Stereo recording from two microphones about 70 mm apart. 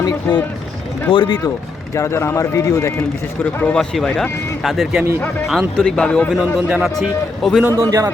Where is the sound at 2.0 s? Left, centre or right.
Left.